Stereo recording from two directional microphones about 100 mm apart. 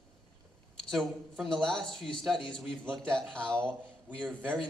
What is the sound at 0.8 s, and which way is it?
Speech, centre (ahead or behind).